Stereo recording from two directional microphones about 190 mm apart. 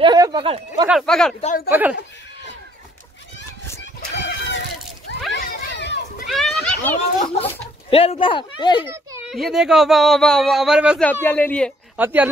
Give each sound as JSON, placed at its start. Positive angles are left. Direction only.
{"t": 0.0, "sound": "speech", "side_deg": -20}
{"t": 0.8, "sound": "speech", "side_deg": 0}
{"t": 1.7, "sound": "speech", "side_deg": -10}
{"t": 4.1, "sound": "a sound", "side_deg": 70}
{"t": 5.3, "sound": "children playing", "side_deg": 55}
{"t": 6.2, "sound": "children playing", "side_deg": 0}
{"t": 7.9, "sound": "speech", "side_deg": 30}
{"t": 8.8, "sound": "children playing", "side_deg": -15}
{"t": 9.3, "sound": "speech", "side_deg": 0}
{"t": 11.1, "sound": "speech", "side_deg": 10}
{"t": 12.0, "sound": "speech", "side_deg": -10}